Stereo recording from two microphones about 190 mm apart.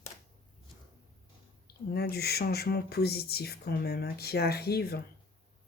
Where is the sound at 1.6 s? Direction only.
55° left (ahead or behind).